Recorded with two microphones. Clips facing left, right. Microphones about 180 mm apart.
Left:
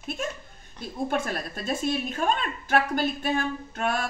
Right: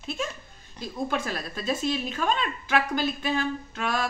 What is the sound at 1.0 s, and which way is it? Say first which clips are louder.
A woman's voice: left 2 dB; 55° left (ahead or behind).